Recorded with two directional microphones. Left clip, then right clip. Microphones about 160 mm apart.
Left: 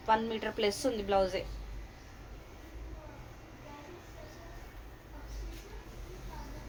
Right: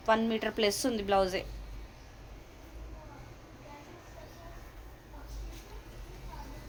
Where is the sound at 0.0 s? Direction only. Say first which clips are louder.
Right 2 dB; 90° right.